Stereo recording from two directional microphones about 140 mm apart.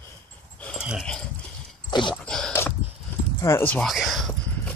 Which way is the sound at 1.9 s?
35° left (ahead or behind).